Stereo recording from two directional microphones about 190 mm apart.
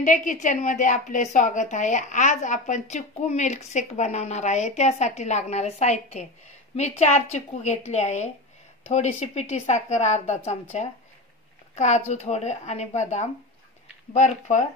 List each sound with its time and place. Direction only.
0.0 s a woman's voice: 40° left (ahead or behind)